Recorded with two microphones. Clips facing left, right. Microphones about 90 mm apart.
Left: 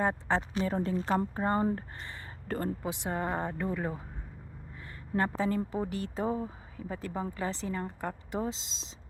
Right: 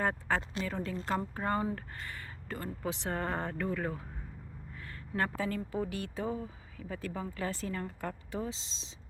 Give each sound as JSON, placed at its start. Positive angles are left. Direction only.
{"t": 0.0, "sound": "speech", "side_deg": 20}
{"t": 0.6, "sound": "speech", "side_deg": 30}
{"t": 2.5, "sound": "speech", "side_deg": 45}
{"t": 2.8, "sound": "speech", "side_deg": 15}
{"t": 5.1, "sound": "speech", "side_deg": 20}